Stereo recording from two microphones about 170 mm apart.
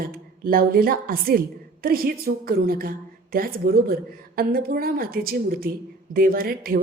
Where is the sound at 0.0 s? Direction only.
60° right (ahead or behind).